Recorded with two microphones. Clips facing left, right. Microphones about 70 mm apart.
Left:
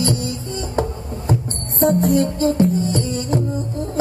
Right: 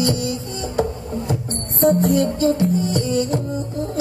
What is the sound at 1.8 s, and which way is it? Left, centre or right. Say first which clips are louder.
Music: even; centre.